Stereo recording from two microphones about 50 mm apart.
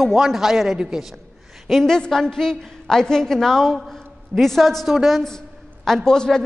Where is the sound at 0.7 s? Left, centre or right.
Centre.